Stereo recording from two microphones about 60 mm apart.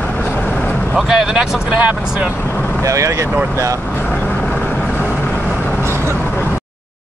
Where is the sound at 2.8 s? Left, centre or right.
Right.